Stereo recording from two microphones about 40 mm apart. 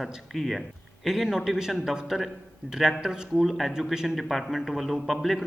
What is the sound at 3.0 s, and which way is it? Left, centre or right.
Speech, centre.